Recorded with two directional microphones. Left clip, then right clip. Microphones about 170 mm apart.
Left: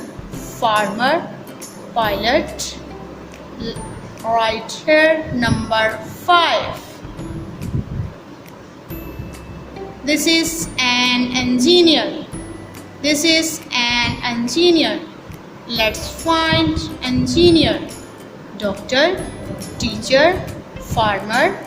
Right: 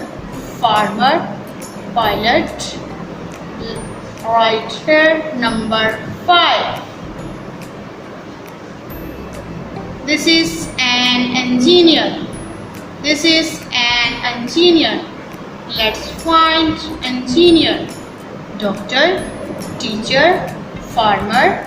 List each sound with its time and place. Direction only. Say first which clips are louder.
0.6 s speech: right 3 dB; 50° left (ahead or behind)
4.4 s speech: right 6 dB; 55° left (ahead or behind)
10.1 s speech: right 3 dB; 55° left (ahead or behind)
18.9 s speech: right 2 dB; 50° left (ahead or behind)